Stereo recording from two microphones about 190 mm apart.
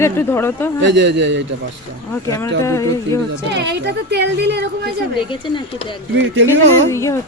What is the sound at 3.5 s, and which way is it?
A woman's voice, 65° right (ahead or behind).